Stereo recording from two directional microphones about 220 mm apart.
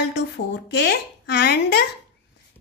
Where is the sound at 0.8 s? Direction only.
50° left (ahead or behind).